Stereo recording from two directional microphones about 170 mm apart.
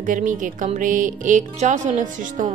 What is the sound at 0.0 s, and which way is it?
A woman's voice, 50° right (ahead or behind).